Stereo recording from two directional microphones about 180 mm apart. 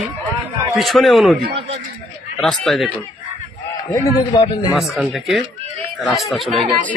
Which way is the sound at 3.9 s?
25° left (ahead or behind).